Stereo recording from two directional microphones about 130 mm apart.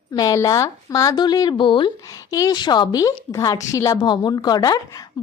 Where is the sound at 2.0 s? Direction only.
25° left (ahead or behind).